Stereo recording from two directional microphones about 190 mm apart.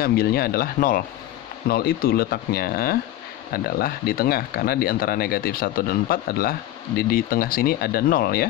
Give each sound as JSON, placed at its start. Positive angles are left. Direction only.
{"t": 0.0, "sound": "speech", "side_deg": 55}